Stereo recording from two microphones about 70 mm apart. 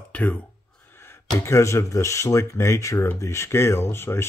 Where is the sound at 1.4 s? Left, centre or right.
Left.